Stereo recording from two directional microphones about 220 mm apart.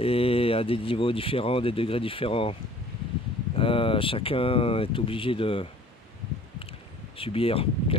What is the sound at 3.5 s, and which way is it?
Speech, 25° left (ahead or behind).